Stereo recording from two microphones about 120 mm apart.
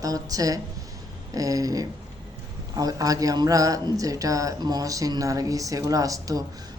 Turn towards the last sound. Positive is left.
turn(degrees=-30)  # may be behind; listen again after turning